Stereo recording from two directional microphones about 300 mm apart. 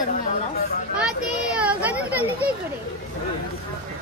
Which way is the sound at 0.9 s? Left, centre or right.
Centre.